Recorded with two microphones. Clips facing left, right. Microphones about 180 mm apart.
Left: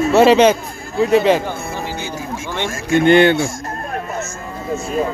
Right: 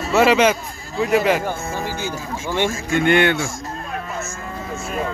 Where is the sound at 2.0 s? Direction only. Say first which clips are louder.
Left 1 dB; 60° left (ahead or behind).